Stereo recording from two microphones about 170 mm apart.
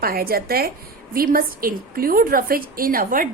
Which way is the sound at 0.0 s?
60° right (ahead or behind).